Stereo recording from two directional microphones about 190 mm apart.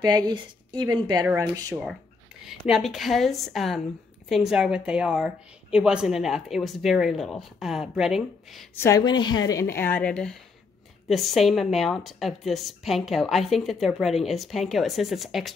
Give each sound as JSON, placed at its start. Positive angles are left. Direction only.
{"t": 0.0, "sound": "a woman's voice", "side_deg": -25}
{"t": 2.4, "sound": "a woman's voice", "side_deg": 0}
{"t": 8.7, "sound": "a woman's voice", "side_deg": 15}